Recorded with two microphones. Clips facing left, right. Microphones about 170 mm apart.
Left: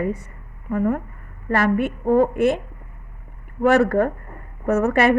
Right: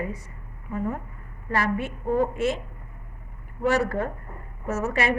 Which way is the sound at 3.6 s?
60° left (ahead or behind).